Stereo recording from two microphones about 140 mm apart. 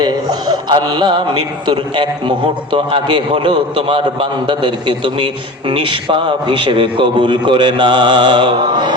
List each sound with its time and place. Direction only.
0.3 s a man's voice: 30° right (ahead or behind)